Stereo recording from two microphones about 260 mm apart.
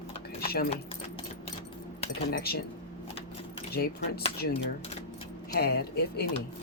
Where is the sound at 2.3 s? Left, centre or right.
Left.